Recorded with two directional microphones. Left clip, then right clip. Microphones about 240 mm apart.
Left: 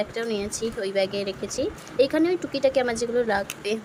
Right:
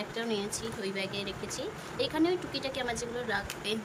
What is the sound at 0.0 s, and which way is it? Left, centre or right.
Speech, centre.